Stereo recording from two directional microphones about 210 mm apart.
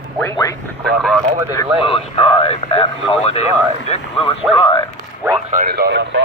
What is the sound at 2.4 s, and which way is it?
Speech, 25° left (ahead or behind).